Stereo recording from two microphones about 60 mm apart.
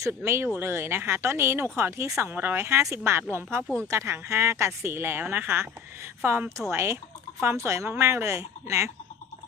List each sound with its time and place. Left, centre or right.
0.1 s speech: right
2.3 s speech: right
3.8 s speech: right